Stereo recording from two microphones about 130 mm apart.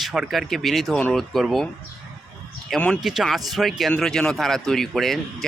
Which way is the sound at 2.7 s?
5° left (ahead or behind).